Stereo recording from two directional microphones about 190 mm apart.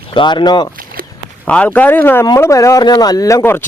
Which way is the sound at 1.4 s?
5° left (ahead or behind).